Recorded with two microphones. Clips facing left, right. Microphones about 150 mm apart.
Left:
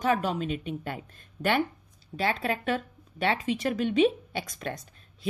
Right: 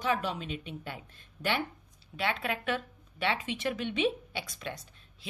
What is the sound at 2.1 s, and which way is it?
A woman's voice, 35° left (ahead or behind).